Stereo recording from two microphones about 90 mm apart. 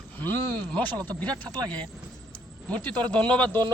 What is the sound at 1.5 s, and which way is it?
Speech, 50° right (ahead or behind).